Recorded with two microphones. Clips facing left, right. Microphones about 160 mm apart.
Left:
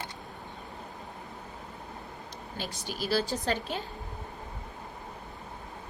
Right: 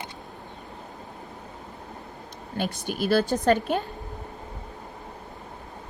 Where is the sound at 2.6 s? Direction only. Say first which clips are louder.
Right 8 dB; 55° right (ahead or behind).